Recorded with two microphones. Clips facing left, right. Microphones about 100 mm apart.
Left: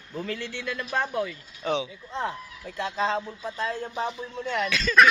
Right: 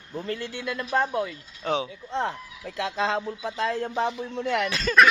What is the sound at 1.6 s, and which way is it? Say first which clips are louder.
Speech: right 1 dB; 45° right (ahead or behind).